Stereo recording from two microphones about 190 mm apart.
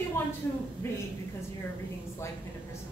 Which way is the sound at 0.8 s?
10° left (ahead or behind).